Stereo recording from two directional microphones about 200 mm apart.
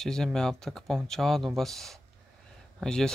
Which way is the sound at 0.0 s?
5° left (ahead or behind).